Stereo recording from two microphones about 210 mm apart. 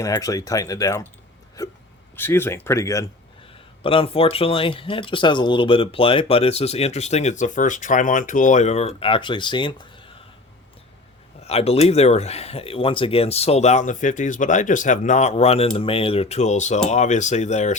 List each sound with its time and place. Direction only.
0.0 s speech: 15° left (ahead or behind)
3.8 s speech: 25° left (ahead or behind)
11.4 s speech: 30° left (ahead or behind)